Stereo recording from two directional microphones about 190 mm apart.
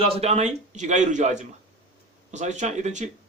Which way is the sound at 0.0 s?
35° right (ahead or behind).